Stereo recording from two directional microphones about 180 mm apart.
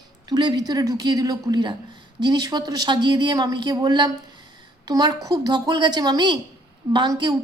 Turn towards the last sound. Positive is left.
turn(degrees=-25)  # may be behind; listen again after turning